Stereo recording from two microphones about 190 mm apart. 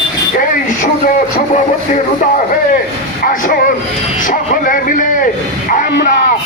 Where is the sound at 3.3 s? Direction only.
45° left (ahead or behind).